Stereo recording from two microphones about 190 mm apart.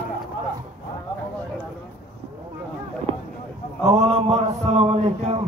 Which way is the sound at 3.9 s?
35° right (ahead or behind).